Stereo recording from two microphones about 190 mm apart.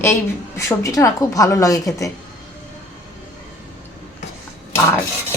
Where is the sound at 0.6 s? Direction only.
15° left (ahead or behind).